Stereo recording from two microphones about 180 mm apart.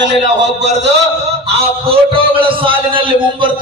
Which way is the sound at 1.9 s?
30° right (ahead or behind).